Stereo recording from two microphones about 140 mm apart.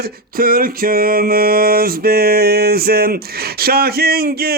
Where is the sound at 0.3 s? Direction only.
90° right.